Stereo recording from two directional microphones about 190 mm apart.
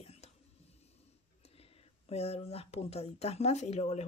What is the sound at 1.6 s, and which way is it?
Speech, 30° left (ahead or behind).